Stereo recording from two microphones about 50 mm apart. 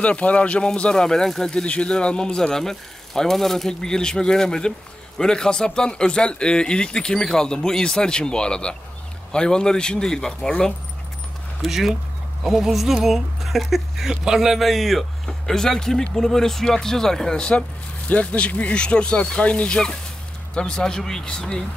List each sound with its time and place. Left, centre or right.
0.0 s speech: left
11.6 s speech: centre